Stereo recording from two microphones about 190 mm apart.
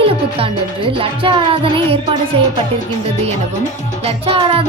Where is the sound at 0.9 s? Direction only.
30° right (ahead or behind).